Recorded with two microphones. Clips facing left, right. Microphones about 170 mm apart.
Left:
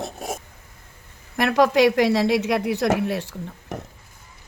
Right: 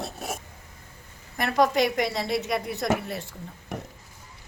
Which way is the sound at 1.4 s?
85° left.